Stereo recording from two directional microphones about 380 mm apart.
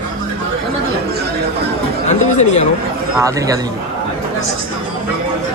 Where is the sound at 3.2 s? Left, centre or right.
Centre.